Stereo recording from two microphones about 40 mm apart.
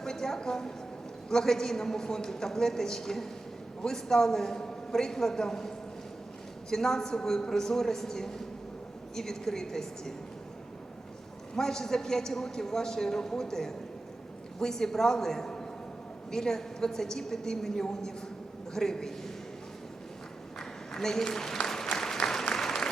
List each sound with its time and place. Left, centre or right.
0.0 s a woman's voice: centre
11.5 s a man's voice: centre
20.6 s applause: centre